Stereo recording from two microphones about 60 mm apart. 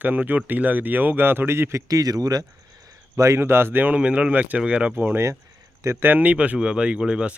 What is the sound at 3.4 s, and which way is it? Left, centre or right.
Speech, right.